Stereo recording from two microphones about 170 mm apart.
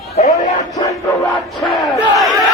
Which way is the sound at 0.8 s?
20° left (ahead or behind).